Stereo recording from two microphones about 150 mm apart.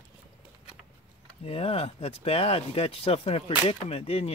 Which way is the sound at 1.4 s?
40° left (ahead or behind).